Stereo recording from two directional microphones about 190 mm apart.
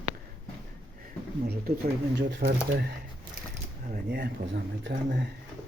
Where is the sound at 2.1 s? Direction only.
65° right (ahead or behind).